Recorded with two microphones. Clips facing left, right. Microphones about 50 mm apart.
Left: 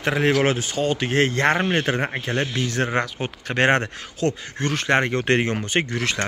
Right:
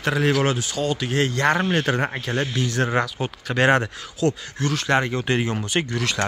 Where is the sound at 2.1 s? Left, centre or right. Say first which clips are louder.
Even; left.